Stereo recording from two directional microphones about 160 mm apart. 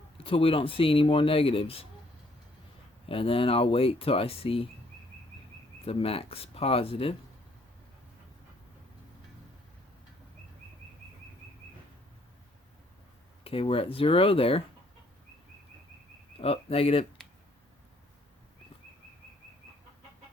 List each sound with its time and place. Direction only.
0.2 s speech: 35° left (ahead or behind)
3.1 s speech: 35° left (ahead or behind)
5.8 s speech: 35° left (ahead or behind)
13.4 s speech: 35° left (ahead or behind)
16.4 s speech: 35° left (ahead or behind)